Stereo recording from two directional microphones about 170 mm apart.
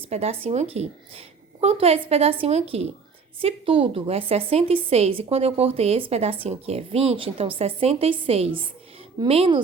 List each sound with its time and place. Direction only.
0.1 s a woman's voice: 35° right (ahead or behind)